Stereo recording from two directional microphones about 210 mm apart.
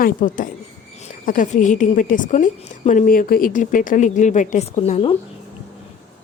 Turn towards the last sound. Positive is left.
turn(degrees=30)  # may be behind; listen again after turning